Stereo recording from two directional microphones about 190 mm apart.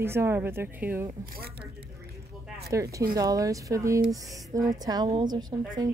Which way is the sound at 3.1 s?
20° right (ahead or behind).